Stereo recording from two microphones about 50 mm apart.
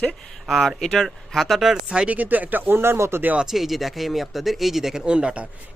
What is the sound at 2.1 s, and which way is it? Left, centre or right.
Speech, right.